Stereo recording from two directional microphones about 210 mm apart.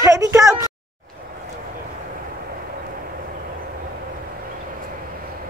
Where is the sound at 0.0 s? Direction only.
15° right (ahead or behind).